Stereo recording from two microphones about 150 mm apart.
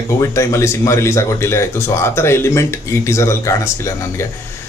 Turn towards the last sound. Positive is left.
turn(degrees=20)  # may be behind; listen again after turning